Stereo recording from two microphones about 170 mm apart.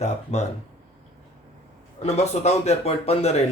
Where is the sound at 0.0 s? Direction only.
40° left (ahead or behind).